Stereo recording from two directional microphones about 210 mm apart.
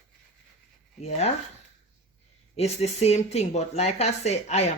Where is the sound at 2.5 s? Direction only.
30° left (ahead or behind).